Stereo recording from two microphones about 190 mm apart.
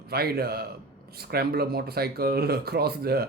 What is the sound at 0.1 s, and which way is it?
Speech, 55° right (ahead or behind).